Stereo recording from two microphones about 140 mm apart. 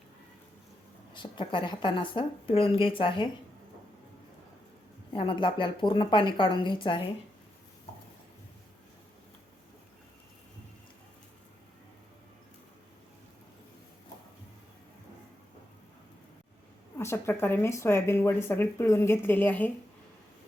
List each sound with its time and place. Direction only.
1.1 s a woman's voice: 35° left (ahead or behind)
5.1 s a woman's voice: 40° left (ahead or behind)
17.0 s speech: 15° left (ahead or behind)